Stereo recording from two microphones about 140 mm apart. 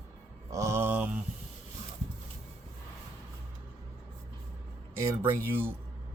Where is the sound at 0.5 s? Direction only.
20° right (ahead or behind).